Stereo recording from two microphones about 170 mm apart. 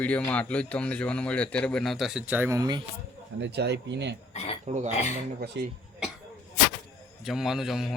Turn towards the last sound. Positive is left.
turn(degrees=0)  # may be behind; listen again after turning